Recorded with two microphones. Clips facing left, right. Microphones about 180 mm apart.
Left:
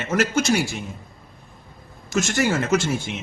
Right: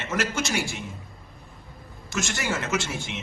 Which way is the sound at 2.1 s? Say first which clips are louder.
Left 7 dB; 40° left (ahead or behind).